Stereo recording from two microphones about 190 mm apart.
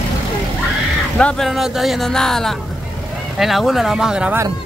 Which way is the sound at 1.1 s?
5° left (ahead or behind).